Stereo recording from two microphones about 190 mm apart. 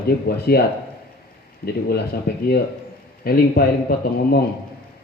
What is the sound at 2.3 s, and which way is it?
A man's voice, 60° left (ahead or behind).